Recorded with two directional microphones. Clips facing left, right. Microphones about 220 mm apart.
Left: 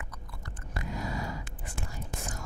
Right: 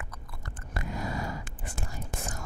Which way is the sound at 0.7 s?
50° right (ahead or behind).